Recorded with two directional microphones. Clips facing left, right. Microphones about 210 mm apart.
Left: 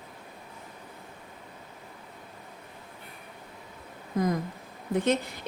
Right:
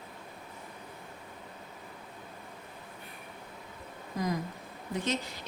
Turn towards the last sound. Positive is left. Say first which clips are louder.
# left 7 dB
turn(degrees=55)  # may be behind; listen again after turning